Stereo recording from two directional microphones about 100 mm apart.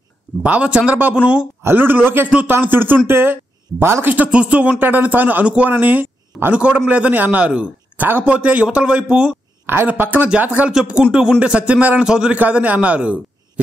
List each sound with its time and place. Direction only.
0.4 s speech: 10° right (ahead or behind)
1.6 s speech: 20° right (ahead or behind)
9.7 s speech: 20° right (ahead or behind)